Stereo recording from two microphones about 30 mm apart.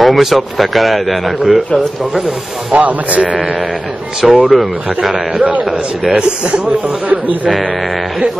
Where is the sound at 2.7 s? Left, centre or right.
Right.